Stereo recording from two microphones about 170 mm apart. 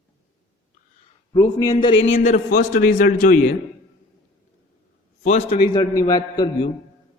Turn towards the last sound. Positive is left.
turn(degrees=25)  # may be behind; listen again after turning